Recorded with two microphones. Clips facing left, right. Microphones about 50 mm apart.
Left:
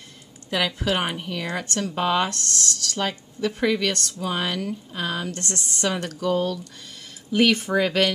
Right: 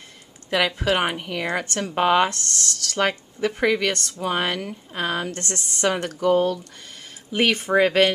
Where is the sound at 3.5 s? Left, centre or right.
Right.